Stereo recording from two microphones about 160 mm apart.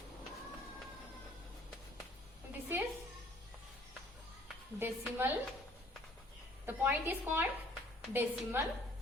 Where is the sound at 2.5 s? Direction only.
10° right (ahead or behind).